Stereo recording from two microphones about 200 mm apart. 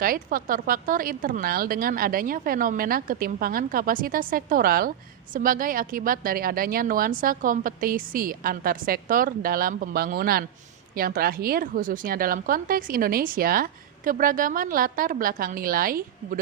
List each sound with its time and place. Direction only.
0.0 s a woman's voice: 45° right (ahead or behind)